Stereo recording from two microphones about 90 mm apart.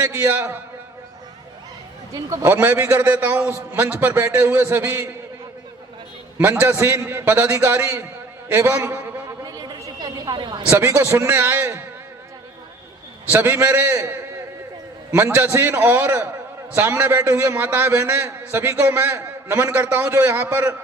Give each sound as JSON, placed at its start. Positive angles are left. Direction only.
{"t": 0.0, "sound": "a man's voice", "side_deg": -30}
{"t": 2.4, "sound": "a man's voice", "side_deg": -25}
{"t": 6.5, "sound": "a man's voice", "side_deg": -20}
{"t": 9.4, "sound": "a sound", "side_deg": -45}
{"t": 10.7, "sound": "a man's voice", "side_deg": -30}
{"t": 13.3, "sound": "a man's voice", "side_deg": -25}